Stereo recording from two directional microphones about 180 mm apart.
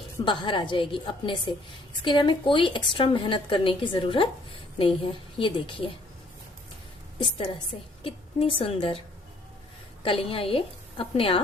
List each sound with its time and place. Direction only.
0.3 s a woman's voice: 25° left (ahead or behind)
8.0 s a woman's voice: 30° left (ahead or behind)
10.0 s a woman's voice: 30° left (ahead or behind)